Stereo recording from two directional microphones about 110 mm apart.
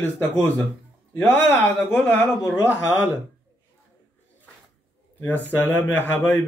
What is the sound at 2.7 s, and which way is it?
Speech, 15° right (ahead or behind).